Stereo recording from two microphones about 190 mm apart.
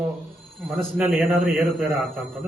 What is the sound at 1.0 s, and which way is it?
A man's voice, centre (ahead or behind).